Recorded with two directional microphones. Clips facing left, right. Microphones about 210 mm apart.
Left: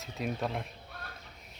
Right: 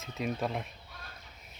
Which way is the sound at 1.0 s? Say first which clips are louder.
Left 4 dB; 60° left (ahead or behind).